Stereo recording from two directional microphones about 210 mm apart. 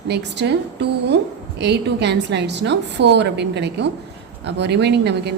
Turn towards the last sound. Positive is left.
turn(degrees=-55)  # may be behind; listen again after turning